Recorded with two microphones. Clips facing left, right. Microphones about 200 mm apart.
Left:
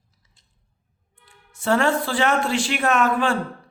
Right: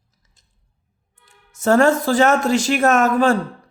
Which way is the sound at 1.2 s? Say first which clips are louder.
Right 5 dB; 45° right (ahead or behind).